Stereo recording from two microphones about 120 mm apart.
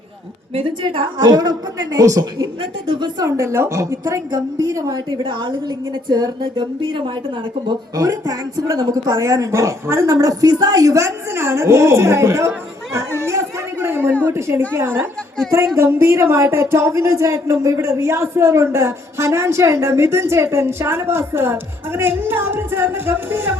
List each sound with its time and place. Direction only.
0.5 s a woman's voice: 50° right (ahead or behind)
1.2 s a woman's voice: 35° right (ahead or behind)
2.4 s a woman's voice: 45° right (ahead or behind)
3.2 s speech: 25° right (ahead or behind)
5.2 s a woman's voice: 40° right (ahead or behind)
7.7 s speech: 30° right (ahead or behind)
13.2 s a sound: 20° right (ahead or behind)
14.3 s speech: 25° right (ahead or behind)